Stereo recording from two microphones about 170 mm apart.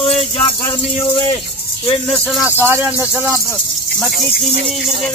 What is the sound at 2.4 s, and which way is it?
Speech, 10° right (ahead or behind).